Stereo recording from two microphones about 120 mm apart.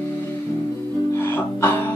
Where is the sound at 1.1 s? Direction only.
20° left (ahead or behind).